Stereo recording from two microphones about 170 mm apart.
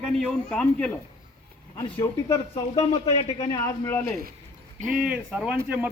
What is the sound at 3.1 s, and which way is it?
Speech, 35° left (ahead or behind).